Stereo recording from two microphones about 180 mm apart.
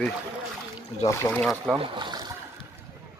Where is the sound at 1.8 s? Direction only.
25° right (ahead or behind).